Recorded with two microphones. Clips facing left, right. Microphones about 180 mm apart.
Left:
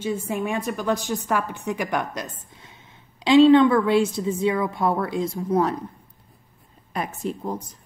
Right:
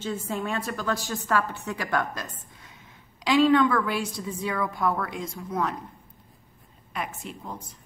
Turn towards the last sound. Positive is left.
turn(degrees=40)  # may be behind; listen again after turning